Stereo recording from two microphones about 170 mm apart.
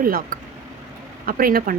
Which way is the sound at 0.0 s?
55° right (ahead or behind).